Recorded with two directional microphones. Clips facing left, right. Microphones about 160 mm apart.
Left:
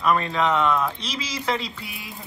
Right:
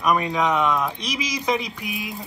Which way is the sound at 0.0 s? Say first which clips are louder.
Right 1 dB; 15° right (ahead or behind).